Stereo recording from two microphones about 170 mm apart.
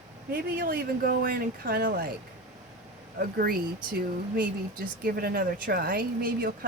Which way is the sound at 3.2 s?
60° right (ahead or behind).